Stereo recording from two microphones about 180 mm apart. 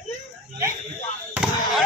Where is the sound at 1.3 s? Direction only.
5° right (ahead or behind).